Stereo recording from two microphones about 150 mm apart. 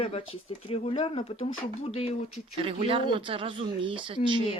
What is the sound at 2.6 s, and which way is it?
Speech, 40° right (ahead or behind).